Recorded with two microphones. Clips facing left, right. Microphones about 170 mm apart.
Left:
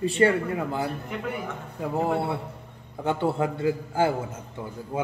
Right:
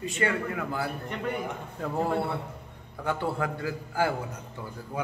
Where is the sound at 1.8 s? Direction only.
15° left (ahead or behind).